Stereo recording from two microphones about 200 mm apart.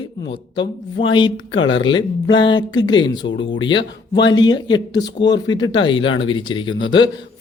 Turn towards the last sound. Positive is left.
turn(degrees=25)  # may be behind; listen again after turning